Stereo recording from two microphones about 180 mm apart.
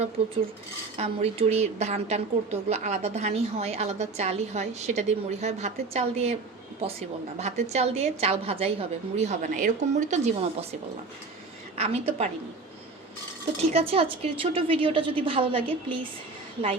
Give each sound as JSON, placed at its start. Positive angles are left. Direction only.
{"t": 0.9, "sound": "a woman's voice", "side_deg": -35}
{"t": 7.3, "sound": "a woman's voice", "side_deg": -40}
{"t": 11.8, "sound": "a woman's voice", "side_deg": -35}
{"t": 13.6, "sound": "a woman's voice", "side_deg": -35}